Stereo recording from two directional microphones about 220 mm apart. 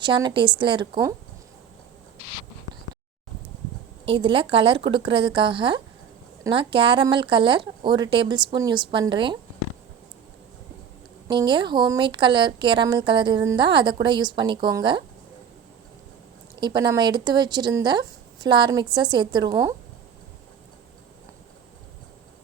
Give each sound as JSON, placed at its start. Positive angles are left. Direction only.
{"t": 0.0, "sound": "speech", "side_deg": -20}
{"t": 4.0, "sound": "a woman's voice", "side_deg": -25}
{"t": 11.3, "sound": "speech", "side_deg": -20}
{"t": 16.6, "sound": "speech", "side_deg": -20}